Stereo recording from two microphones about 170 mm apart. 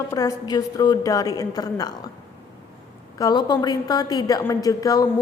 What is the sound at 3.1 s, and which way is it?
A woman's voice, 25° left (ahead or behind).